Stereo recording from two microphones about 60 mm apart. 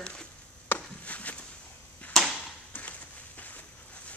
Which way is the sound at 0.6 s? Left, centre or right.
Left.